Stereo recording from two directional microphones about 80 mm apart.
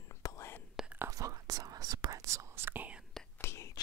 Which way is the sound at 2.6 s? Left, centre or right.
Right.